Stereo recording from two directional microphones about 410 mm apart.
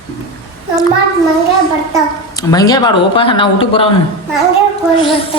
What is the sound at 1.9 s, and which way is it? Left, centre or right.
A man's voice, centre.